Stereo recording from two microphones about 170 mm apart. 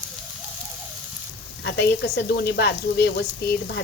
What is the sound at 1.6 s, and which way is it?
Speech, 85° left.